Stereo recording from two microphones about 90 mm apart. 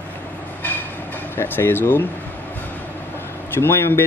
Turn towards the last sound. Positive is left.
turn(degrees=25)  # may be behind; listen again after turning